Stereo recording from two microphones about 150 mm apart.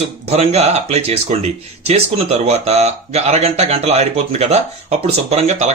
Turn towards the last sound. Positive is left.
turn(degrees=-45)  # may be behind; listen again after turning